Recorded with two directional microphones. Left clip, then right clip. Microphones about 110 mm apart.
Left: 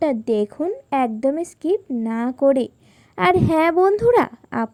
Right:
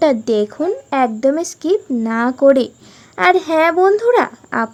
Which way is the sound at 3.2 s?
50° left (ahead or behind).